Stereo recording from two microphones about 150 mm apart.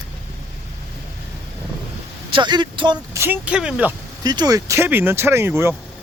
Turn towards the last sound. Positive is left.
turn(degrees=-15)  # may be behind; listen again after turning